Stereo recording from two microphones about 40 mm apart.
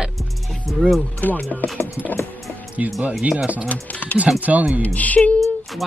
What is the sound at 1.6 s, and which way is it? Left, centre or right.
Music, left.